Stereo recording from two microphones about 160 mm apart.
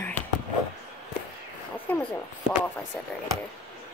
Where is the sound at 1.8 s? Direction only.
10° left (ahead or behind).